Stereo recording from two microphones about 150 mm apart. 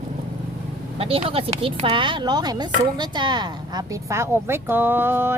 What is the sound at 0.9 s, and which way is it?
Speech, 40° right (ahead or behind).